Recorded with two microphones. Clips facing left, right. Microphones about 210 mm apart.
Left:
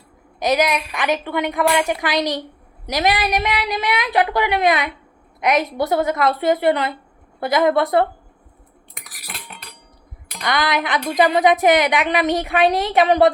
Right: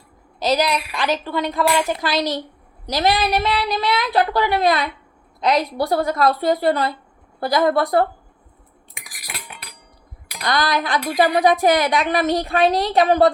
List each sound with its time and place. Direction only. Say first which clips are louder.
0.3 s a woman's voice: left 1 dB; 20° left (ahead or behind)
9.0 s cutlery: right 1 dB; 10° right (ahead or behind)
10.4 s a woman's voice: even; 20° left (ahead or behind)